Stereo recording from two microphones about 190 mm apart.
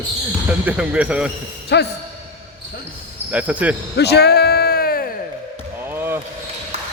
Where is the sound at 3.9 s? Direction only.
60° left (ahead or behind).